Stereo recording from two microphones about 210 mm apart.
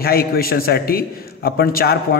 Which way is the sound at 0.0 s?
45° left (ahead or behind).